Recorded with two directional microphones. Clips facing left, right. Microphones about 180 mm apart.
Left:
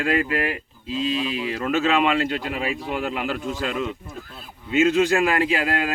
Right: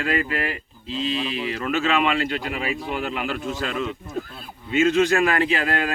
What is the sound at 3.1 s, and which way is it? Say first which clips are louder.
Speech: left 1 dB; 15° left (ahead or behind).